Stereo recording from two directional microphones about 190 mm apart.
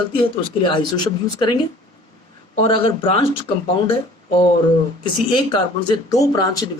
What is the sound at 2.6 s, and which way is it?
Speech, 30° left (ahead or behind).